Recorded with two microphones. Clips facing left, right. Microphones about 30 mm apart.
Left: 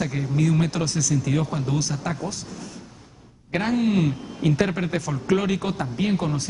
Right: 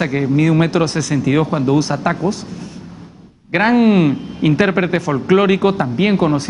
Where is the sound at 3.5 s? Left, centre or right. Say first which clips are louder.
Right 10 dB; right.